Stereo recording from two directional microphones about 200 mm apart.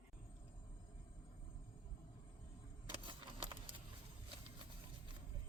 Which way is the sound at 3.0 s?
25° right (ahead or behind).